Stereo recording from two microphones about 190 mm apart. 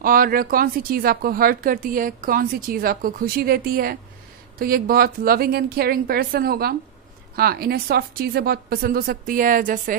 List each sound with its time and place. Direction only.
0.0 s speech: 50° right (ahead or behind)